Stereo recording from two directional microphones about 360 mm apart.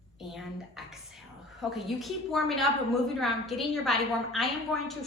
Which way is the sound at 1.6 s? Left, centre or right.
Centre.